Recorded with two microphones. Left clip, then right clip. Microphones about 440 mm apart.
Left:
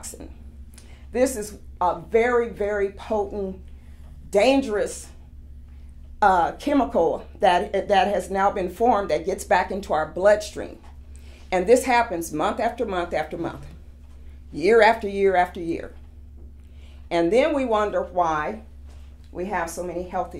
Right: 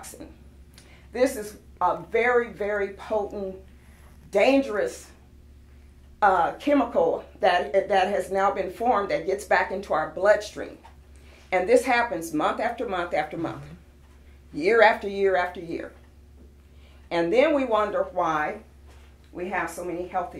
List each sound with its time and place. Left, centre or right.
1.1 s speech: left
4.3 s speech: left
6.1 s speech: left
14.5 s speech: left
17.1 s speech: left
19.3 s speech: left